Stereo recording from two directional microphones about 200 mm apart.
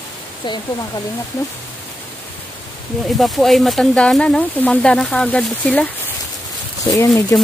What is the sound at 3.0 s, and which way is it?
Speech, centre (ahead or behind).